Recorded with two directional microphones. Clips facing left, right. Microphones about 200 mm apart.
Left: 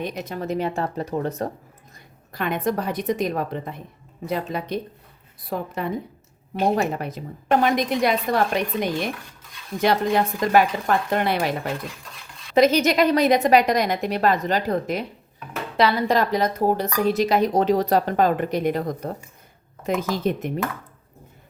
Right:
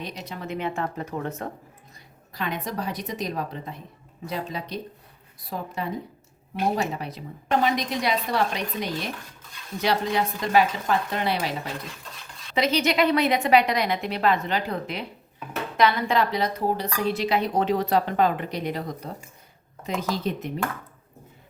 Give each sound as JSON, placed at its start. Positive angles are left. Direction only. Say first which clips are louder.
{"t": 0.0, "sound": "speech", "louder": "left 6 dB", "side_deg": 50}
{"t": 2.3, "sound": "a woman's voice", "louder": "left 6 dB", "side_deg": 55}
{"t": 15.8, "sound": "speech", "louder": "left 2 dB", "side_deg": 35}